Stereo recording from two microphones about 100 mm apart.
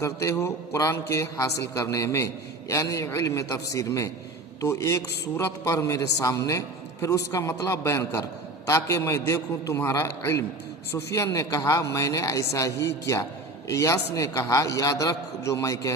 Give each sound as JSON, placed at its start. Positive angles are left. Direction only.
{"t": 0.0, "sound": "a man's voice", "side_deg": 30}